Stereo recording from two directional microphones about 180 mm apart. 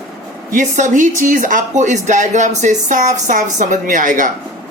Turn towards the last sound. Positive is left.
turn(degrees=-45)  # may be behind; listen again after turning